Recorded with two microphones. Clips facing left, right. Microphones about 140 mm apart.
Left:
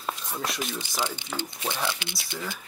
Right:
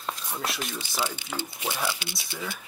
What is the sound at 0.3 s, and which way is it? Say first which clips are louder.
Speech: even; centre (ahead or behind).